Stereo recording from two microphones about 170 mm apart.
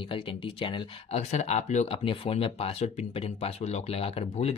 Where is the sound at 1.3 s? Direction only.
40° left (ahead or behind).